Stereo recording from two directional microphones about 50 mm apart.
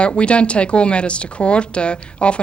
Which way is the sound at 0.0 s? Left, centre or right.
Left.